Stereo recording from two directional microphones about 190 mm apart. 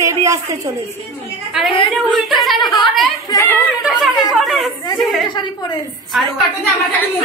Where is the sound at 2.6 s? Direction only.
25° left (ahead or behind).